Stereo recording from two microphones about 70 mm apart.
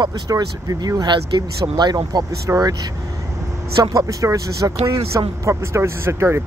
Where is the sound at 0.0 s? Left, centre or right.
Right.